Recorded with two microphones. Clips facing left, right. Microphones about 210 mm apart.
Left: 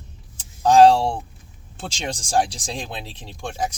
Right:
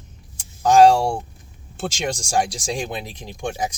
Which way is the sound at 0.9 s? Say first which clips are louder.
Even; 10° right (ahead or behind).